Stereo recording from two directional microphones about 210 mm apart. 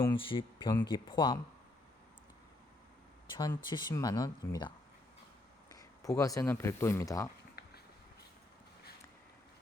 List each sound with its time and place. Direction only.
0.0 s speech: 25° left (ahead or behind)
3.3 s speech: 20° left (ahead or behind)
5.7 s speech: 15° left (ahead or behind)
7.6 s a sound: 45° left (ahead or behind)